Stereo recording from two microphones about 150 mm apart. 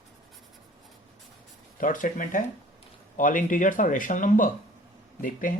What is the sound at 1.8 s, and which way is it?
Speech, 60° left (ahead or behind).